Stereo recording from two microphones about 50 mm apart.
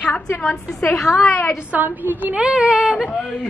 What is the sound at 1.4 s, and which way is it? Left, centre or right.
Speech, left.